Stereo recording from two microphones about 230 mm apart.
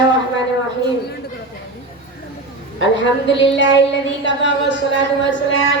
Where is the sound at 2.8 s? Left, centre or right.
Left.